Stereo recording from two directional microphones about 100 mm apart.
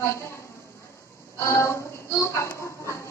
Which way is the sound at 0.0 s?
25° left (ahead or behind).